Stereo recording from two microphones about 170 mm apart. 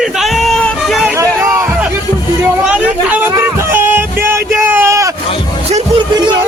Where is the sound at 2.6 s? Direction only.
10° right (ahead or behind).